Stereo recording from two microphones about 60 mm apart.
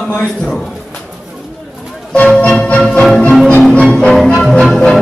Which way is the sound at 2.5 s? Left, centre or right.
Centre.